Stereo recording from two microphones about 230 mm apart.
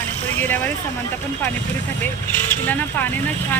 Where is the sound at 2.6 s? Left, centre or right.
Centre.